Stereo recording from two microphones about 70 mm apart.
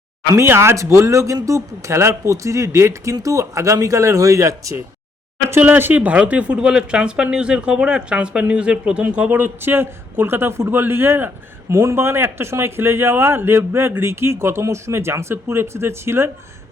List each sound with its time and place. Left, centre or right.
0.3 s speech: right
5.5 s speech: right